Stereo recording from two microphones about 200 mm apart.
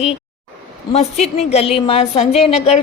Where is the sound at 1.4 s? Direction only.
30° left (ahead or behind).